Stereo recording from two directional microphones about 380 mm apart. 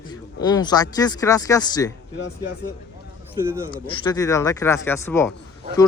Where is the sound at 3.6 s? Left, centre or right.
Centre.